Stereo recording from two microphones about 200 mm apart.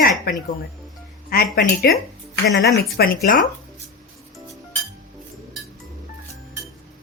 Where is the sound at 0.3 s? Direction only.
50° left (ahead or behind).